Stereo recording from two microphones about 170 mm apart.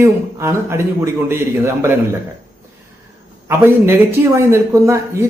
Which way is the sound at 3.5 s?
15° right (ahead or behind).